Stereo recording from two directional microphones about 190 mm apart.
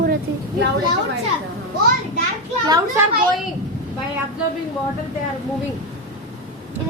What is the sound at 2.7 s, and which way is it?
Speech, 10° right (ahead or behind).